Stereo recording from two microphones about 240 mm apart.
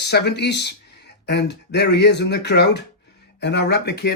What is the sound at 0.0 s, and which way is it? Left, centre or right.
Speech, left.